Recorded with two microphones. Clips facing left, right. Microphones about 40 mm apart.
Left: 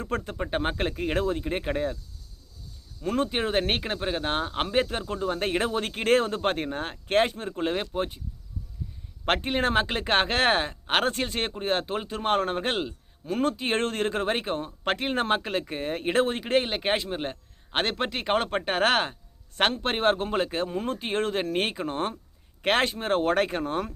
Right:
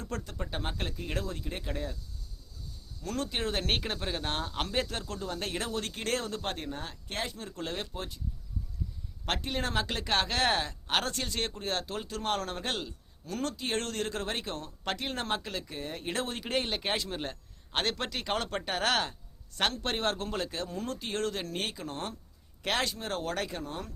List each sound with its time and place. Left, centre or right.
0.0 s speech: left
3.0 s speech: left
7.4 s speech: left
9.2 s speech: left